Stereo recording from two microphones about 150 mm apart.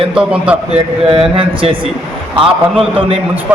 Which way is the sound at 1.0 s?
35° right (ahead or behind).